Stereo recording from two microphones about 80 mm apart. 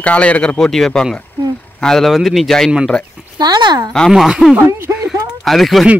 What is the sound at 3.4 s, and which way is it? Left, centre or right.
Speech, right.